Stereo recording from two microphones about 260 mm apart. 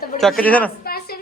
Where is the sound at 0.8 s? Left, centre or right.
Left.